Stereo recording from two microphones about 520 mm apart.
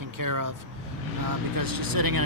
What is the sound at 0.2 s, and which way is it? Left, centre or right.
Speech, right.